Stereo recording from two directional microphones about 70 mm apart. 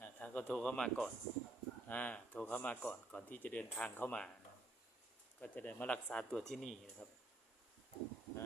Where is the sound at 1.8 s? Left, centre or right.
Left.